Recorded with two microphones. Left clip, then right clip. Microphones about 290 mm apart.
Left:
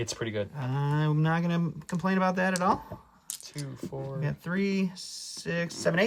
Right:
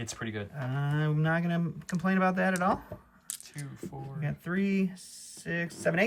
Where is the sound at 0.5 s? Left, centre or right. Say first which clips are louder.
Left 3 dB; centre.